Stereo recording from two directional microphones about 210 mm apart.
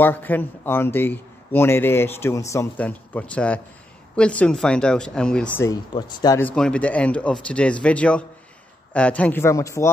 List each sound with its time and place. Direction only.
0.0 s speech: 10° left (ahead or behind)
5.7 s speech: 20° left (ahead or behind)
6.4 s speech: 5° left (ahead or behind)